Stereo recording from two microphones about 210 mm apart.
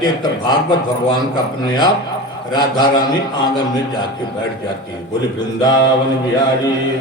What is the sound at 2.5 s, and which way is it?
A man's voice, 20° left (ahead or behind).